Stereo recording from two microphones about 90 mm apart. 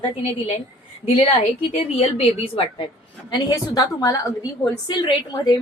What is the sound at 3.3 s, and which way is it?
A woman's voice, 50° left (ahead or behind).